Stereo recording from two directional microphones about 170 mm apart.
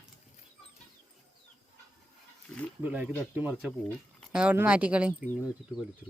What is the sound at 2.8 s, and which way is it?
Speech, 10° right (ahead or behind).